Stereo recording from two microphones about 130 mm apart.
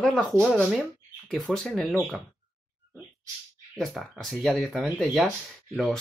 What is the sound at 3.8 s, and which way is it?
Speech, centre (ahead or behind).